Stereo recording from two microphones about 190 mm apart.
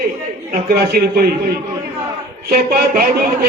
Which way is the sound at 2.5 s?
50° right (ahead or behind).